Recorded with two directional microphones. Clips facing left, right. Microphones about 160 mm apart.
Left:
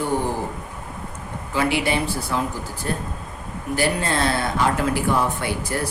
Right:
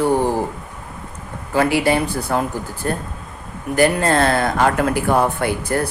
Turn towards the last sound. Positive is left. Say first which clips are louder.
# right 5 dB
turn(degrees=-55)  # may be behind; listen again after turning